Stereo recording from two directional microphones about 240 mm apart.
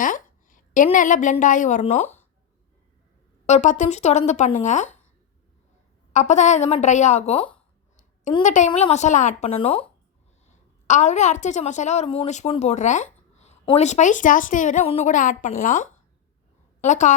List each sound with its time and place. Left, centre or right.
0.0 s a woman's voice: left
3.4 s a woman's voice: left
6.1 s a woman's voice: left